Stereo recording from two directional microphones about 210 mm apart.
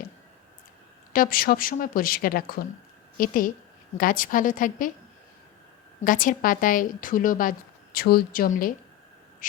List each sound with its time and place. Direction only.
1.1 s a woman's voice: 45° left (ahead or behind)
6.1 s a woman's voice: 40° left (ahead or behind)
9.4 s a sound: 40° left (ahead or behind)